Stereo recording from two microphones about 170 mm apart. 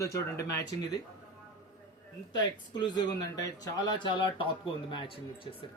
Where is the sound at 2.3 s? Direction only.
25° left (ahead or behind).